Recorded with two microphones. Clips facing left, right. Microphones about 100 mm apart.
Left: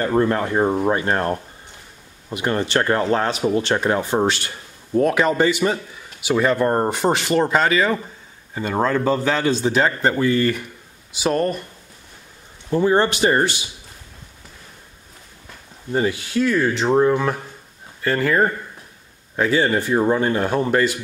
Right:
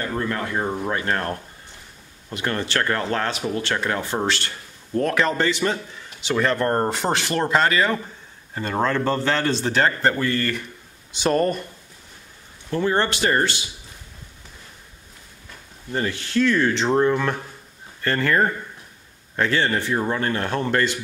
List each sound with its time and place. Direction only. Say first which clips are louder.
0.0 s speech: left 7 dB; 30° left (ahead or behind); by 11.6 s centre (ahead or behind)
12.6 s speech: left 4 dB; 15° left (ahead or behind)
15.9 s speech: left 4 dB; 15° left (ahead or behind)